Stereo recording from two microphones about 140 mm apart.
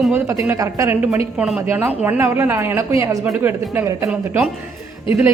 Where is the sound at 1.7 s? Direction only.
15° right (ahead or behind).